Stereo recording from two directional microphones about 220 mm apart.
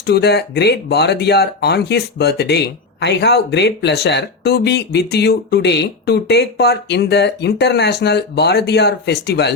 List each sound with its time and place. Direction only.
0.0 s speech: 50° left (ahead or behind)